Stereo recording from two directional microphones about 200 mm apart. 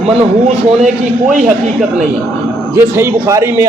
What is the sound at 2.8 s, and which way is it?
Speech, 10° right (ahead or behind).